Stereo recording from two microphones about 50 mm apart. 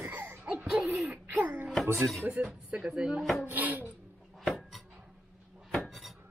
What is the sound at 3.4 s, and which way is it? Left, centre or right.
Filing, right.